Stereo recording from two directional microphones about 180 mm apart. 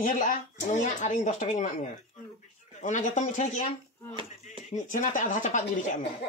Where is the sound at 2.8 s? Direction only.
45° left (ahead or behind).